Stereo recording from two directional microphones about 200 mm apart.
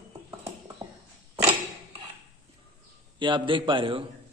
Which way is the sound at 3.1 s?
25° right (ahead or behind).